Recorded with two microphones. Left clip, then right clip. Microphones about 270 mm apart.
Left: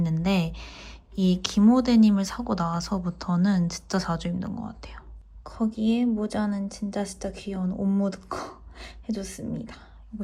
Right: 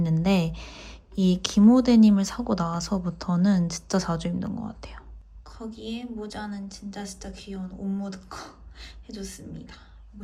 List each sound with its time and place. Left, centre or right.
0.0 s speech: centre
5.5 s a woman's voice: centre